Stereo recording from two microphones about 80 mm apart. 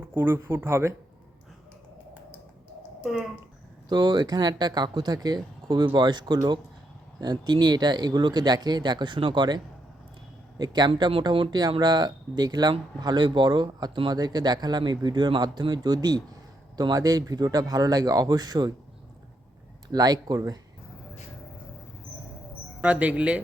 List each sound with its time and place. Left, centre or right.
0.1 s speech: right
3.0 s speech: centre
3.8 s speech: right
10.6 s speech: right
19.9 s speech: right
22.8 s speech: centre